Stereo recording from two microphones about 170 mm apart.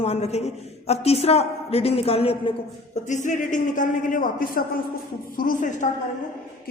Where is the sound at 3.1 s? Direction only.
45° left (ahead or behind).